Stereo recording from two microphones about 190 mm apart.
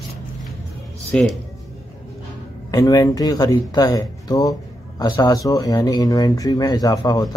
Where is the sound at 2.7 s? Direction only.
20° left (ahead or behind).